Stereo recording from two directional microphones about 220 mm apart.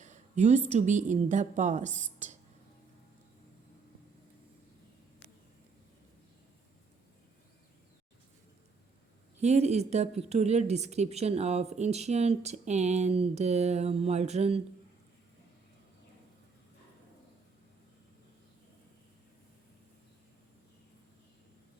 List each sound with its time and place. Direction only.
0.0 s a woman's voice: 30° right (ahead or behind)
9.4 s a woman's voice: 30° right (ahead or behind)